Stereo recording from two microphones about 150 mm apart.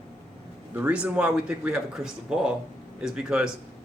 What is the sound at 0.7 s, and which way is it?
Speech, 10° right (ahead or behind).